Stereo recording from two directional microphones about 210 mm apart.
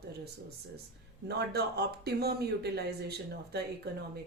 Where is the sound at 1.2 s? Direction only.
50° right (ahead or behind).